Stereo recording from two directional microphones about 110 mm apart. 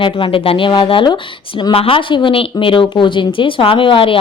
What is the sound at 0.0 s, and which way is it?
A woman's voice, 50° left (ahead or behind).